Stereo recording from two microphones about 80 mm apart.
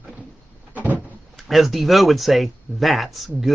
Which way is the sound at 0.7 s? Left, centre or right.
Right.